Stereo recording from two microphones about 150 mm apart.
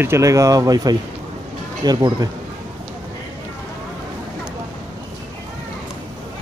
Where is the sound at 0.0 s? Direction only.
20° right (ahead or behind).